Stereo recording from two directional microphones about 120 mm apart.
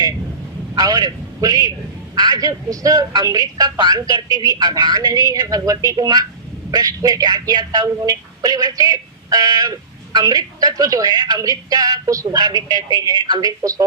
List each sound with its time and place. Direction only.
0.8 s speech: 35° right (ahead or behind)